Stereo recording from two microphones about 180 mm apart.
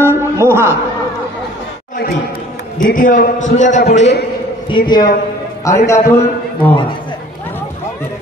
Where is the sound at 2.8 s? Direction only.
50° left (ahead or behind).